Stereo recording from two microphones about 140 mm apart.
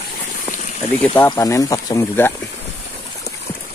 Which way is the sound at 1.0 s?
15° left (ahead or behind).